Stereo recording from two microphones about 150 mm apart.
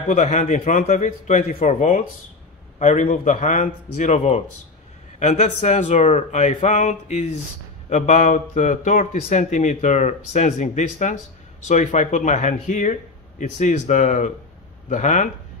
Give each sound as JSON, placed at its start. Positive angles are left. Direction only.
{"t": 0.1, "sound": "a man's voice", "side_deg": 55}